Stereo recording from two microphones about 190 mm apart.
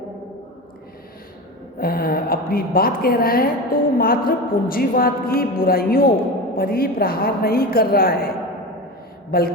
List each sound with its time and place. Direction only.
1.8 s a woman's voice: 50° left (ahead or behind)